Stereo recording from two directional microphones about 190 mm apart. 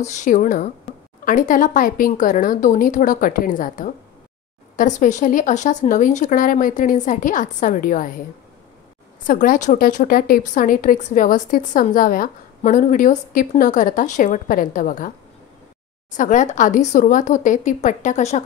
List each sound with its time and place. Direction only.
0.0 s a woman's voice: 40° left (ahead or behind)
16.1 s speech: 40° left (ahead or behind)